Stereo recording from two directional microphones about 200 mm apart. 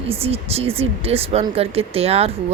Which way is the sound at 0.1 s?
30° right (ahead or behind).